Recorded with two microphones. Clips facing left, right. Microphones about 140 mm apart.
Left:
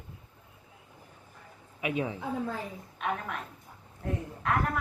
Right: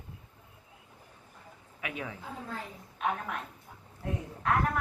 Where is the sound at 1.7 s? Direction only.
20° left (ahead or behind).